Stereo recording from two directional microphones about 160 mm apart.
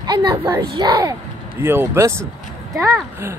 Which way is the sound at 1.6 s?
15° right (ahead or behind).